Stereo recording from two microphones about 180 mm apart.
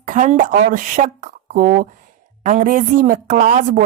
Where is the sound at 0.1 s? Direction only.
45° right (ahead or behind).